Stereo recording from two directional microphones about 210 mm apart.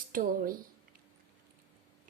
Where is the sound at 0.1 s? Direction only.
40° right (ahead or behind).